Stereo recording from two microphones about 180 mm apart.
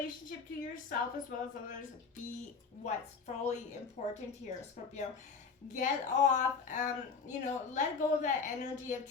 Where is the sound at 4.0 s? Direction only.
40° left (ahead or behind).